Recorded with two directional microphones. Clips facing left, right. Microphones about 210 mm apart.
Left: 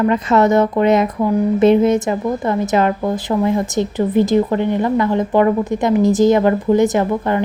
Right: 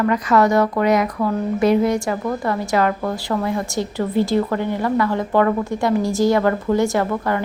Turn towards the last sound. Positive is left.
turn(degrees=20)  # may be behind; listen again after turning